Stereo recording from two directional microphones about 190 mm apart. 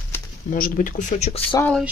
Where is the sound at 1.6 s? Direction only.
5° left (ahead or behind).